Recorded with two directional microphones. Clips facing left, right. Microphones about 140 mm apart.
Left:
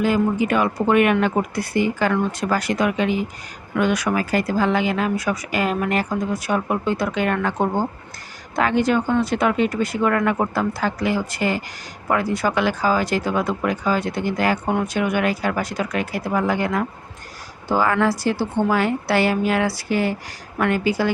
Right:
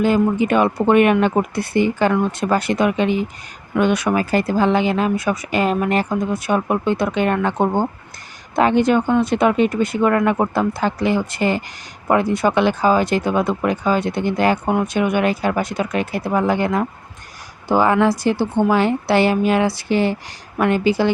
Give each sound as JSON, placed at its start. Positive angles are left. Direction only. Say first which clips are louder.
{"t": 0.0, "sound": "speech", "louder": "right 3 dB", "side_deg": -25}